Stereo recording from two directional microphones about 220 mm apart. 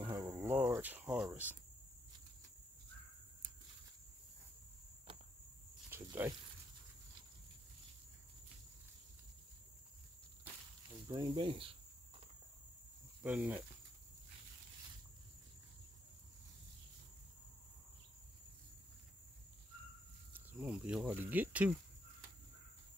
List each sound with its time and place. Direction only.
0.0 s cricket: 15° right (ahead or behind)
5.9 s a sound: 10° right (ahead or behind)
11.1 s speech: 20° right (ahead or behind)
13.2 s speech: 5° right (ahead or behind)
20.3 s speech: 5° right (ahead or behind)